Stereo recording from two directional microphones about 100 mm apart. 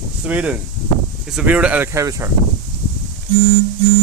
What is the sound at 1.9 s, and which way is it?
Speech, 30° right (ahead or behind).